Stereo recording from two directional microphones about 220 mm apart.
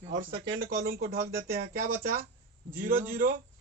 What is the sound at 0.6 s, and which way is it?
Speech, 45° right (ahead or behind).